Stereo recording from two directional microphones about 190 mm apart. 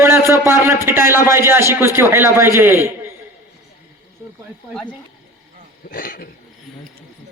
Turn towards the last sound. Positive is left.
turn(degrees=50)  # may be behind; listen again after turning